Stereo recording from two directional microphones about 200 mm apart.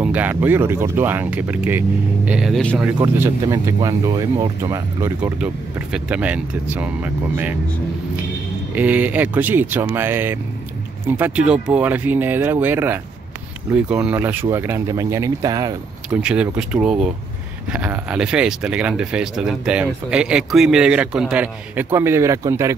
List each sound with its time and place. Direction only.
0.0 s speech: 10° right (ahead or behind)
3.0 s speech: 20° right (ahead or behind)
8.7 s speech: 10° right (ahead or behind)
16.1 s speech: 5° right (ahead or behind)